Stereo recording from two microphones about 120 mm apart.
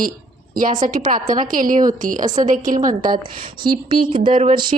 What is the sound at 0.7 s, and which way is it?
A woman's voice, 90° right.